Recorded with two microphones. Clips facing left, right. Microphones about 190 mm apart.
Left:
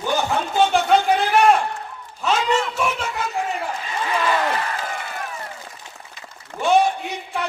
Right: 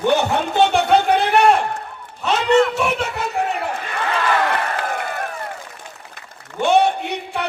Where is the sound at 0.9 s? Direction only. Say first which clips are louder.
Right 1 dB; 65° right (ahead or behind).